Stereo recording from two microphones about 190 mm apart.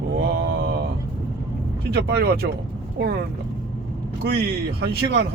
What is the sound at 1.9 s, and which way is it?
Speech, 55° right (ahead or behind).